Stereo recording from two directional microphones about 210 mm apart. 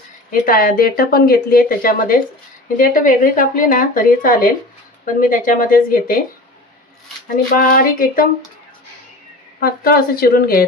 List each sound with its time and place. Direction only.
0.3 s speech: 45° left (ahead or behind)
7.5 s speech: 40° left (ahead or behind)
9.6 s speech: 45° left (ahead or behind)